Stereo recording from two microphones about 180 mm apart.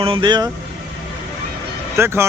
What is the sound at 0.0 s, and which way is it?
Speech, 30° right (ahead or behind).